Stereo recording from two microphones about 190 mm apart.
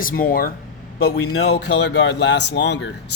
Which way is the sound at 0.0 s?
45° left (ahead or behind).